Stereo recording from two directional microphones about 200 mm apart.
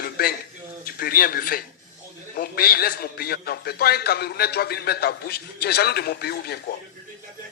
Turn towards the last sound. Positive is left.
turn(degrees=55)  # may be behind; listen again after turning